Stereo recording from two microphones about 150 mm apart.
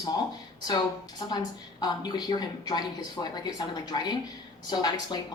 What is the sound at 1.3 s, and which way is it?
Speech, 25° left (ahead or behind).